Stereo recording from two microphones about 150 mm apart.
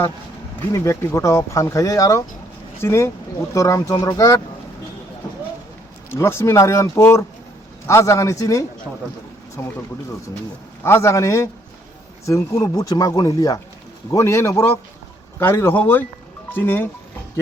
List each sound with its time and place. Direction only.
0.7 s a man's voice: 20° left (ahead or behind)
6.1 s speech: 20° left (ahead or behind)
10.8 s a man's voice: 20° left (ahead or behind)